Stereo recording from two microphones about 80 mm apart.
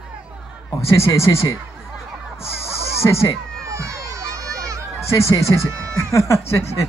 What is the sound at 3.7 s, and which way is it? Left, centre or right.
Crowd, right.